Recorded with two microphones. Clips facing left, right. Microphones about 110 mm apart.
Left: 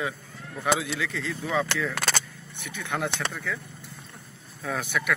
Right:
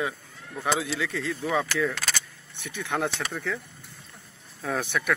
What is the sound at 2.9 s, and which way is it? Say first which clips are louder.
Speech: right 2 dB; 30° right (ahead or behind).